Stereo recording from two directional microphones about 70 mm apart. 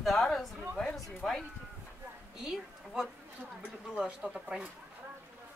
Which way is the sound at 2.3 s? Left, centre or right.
Centre.